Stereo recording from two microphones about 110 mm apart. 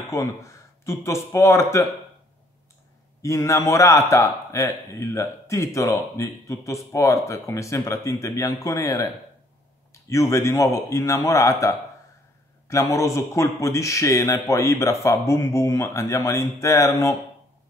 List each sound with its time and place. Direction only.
0.1 s speech: 30° left (ahead or behind)
3.2 s speech: 30° left (ahead or behind)
10.0 s speech: 25° left (ahead or behind)